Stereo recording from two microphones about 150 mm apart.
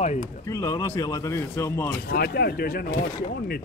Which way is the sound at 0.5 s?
25° left (ahead or behind).